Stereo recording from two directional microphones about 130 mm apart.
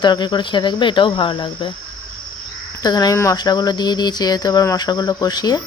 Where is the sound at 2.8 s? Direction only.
30° left (ahead or behind).